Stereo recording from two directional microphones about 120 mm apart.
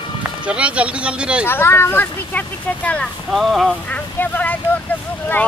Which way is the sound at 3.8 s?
15° left (ahead or behind).